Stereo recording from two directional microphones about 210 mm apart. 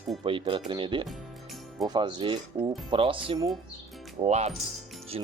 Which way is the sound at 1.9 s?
20° right (ahead or behind).